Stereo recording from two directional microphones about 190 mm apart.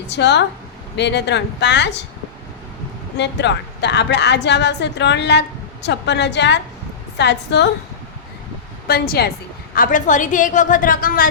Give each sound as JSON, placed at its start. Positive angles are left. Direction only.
{"t": 0.1, "sound": "a woman's voice", "side_deg": 65}
{"t": 3.2, "sound": "a woman's voice", "side_deg": 65}
{"t": 8.9, "sound": "a woman's voice", "side_deg": 55}
{"t": 9.7, "sound": "a woman's voice", "side_deg": 45}